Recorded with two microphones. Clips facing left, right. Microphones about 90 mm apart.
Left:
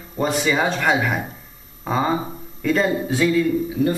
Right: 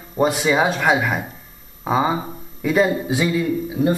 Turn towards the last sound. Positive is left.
turn(degrees=-20)  # may be behind; listen again after turning